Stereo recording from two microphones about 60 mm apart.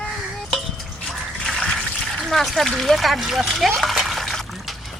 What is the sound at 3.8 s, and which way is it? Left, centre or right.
Liquid, centre.